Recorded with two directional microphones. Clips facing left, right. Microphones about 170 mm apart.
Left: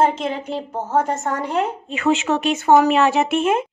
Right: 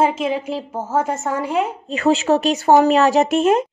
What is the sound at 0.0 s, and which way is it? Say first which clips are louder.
A woman's voice: right 1 dB; 10° right (ahead or behind).